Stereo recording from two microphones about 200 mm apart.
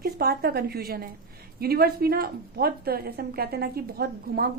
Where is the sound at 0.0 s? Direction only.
50° right (ahead or behind).